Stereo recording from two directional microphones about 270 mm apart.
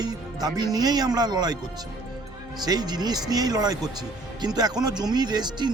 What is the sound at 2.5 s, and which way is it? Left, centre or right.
Speech, centre.